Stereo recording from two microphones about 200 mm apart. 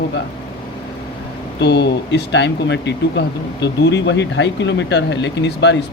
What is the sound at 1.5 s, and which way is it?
Speech, 60° left (ahead or behind).